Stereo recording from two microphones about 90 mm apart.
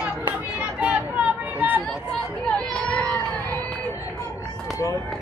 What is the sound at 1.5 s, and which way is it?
Chatter, 20° right (ahead or behind).